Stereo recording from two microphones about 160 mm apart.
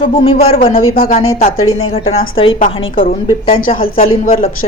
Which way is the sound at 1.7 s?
40° left (ahead or behind).